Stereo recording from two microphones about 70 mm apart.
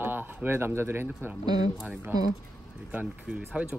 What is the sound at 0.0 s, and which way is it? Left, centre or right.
Speech, right.